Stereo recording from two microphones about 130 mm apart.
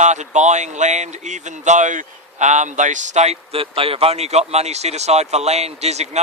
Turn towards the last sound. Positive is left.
turn(degrees=-55)  # may be behind; listen again after turning